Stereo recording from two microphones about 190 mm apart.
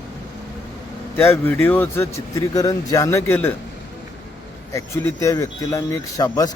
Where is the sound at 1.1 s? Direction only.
10° left (ahead or behind).